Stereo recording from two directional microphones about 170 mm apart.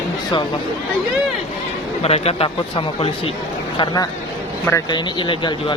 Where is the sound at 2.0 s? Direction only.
35° left (ahead or behind).